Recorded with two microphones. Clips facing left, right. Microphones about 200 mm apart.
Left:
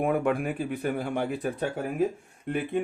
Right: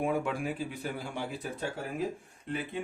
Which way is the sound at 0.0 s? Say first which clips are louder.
Left 5 dB; 55° left (ahead or behind).